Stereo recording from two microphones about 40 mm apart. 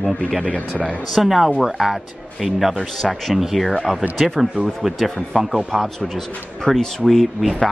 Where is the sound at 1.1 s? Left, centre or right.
Centre.